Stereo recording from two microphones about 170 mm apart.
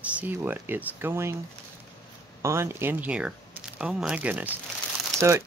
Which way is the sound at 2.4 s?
15° right (ahead or behind).